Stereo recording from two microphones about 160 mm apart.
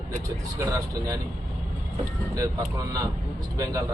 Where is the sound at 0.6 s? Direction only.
20° right (ahead or behind).